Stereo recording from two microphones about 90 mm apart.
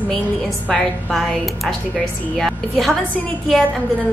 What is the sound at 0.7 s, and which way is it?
A woman's voice, 5° left (ahead or behind).